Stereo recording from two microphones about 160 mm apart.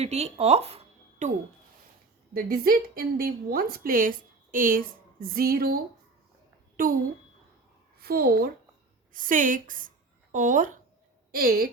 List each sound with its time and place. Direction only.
0.0 s speech: 40° right (ahead or behind)
2.3 s a woman's voice: 65° right (ahead or behind)
7.9 s a woman's voice: 75° right (ahead or behind)
9.1 s a woman's voice: 55° right (ahead or behind)
11.3 s a woman's voice: 70° right (ahead or behind)